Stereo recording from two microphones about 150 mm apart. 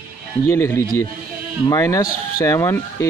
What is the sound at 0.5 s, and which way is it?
Speech, 15° left (ahead or behind).